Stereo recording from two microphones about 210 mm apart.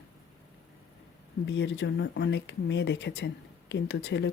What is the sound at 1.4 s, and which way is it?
Speech, 55° left (ahead or behind).